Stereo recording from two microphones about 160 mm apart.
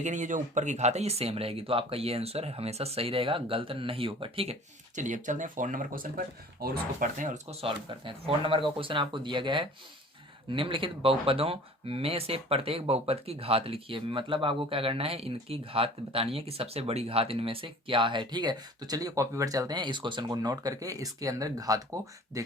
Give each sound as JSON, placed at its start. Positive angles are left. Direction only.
{"t": 0.0, "sound": "speech", "side_deg": -50}
{"t": 4.9, "sound": "speech", "side_deg": -50}
{"t": 7.6, "sound": "speech", "side_deg": -35}